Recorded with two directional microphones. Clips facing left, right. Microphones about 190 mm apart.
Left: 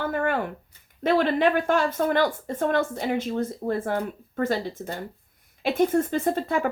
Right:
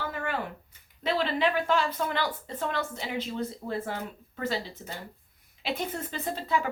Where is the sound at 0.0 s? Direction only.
55° left (ahead or behind).